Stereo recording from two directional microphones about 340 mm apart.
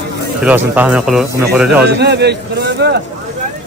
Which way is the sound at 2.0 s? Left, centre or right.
Right.